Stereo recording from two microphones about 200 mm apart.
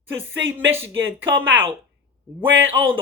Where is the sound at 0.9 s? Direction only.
70° right (ahead or behind).